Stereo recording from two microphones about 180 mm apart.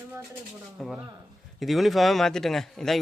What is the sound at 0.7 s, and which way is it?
A man's voice, centre (ahead or behind).